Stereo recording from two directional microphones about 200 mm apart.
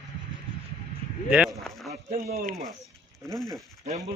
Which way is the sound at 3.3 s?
Centre (ahead or behind).